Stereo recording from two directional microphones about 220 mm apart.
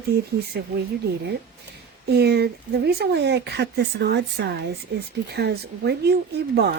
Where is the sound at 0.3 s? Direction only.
45° right (ahead or behind).